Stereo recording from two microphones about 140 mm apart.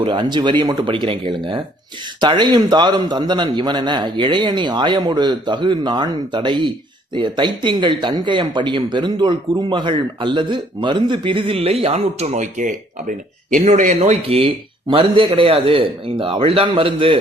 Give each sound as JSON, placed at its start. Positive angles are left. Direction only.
{"t": 0.0, "sound": "speech", "side_deg": -35}